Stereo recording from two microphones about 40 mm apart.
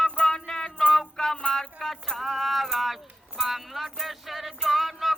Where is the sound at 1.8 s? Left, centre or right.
Centre.